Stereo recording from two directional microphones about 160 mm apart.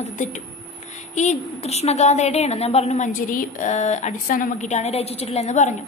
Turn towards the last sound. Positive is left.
turn(degrees=45)  # may be behind; listen again after turning